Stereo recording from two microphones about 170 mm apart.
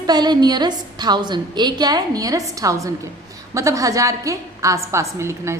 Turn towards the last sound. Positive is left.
turn(degrees=-15)  # may be behind; listen again after turning